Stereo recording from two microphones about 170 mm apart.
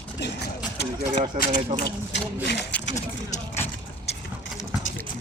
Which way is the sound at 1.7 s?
25° right (ahead or behind).